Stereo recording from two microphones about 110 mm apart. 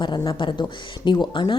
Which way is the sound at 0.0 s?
45° left (ahead or behind).